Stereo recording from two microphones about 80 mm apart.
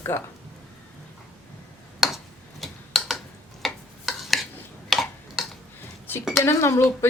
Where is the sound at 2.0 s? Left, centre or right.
Centre.